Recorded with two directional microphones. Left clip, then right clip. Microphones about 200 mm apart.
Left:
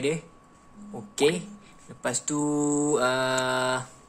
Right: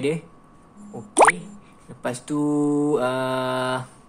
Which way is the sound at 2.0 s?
5° left (ahead or behind).